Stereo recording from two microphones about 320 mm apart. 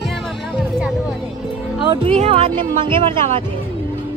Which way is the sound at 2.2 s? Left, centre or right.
Centre.